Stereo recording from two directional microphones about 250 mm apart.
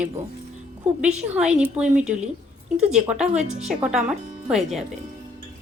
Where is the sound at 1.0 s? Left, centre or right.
Centre.